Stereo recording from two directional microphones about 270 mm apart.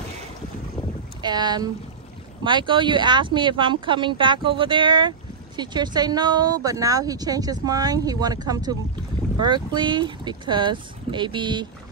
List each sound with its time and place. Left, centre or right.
1.2 s speech: centre